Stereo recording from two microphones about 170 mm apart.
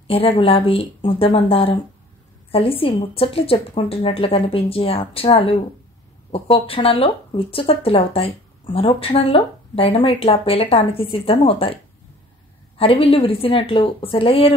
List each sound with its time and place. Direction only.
0.1 s speech: 35° left (ahead or behind)